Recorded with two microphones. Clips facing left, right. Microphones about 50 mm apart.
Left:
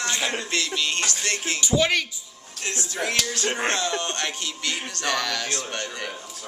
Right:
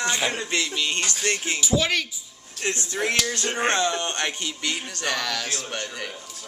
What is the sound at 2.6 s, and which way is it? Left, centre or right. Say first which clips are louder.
Speech: right 2 dB; right.